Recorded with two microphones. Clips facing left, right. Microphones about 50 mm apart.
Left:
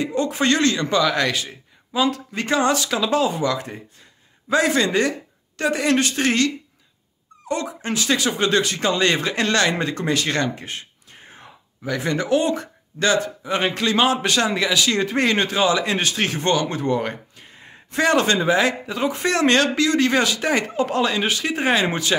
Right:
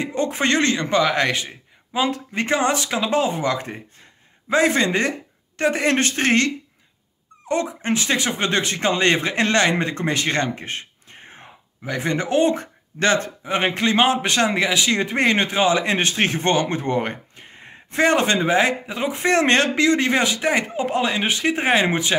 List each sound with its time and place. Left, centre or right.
0.0 s a man's voice: right